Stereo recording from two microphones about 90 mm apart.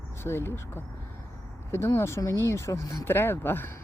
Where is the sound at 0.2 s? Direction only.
30° left (ahead or behind).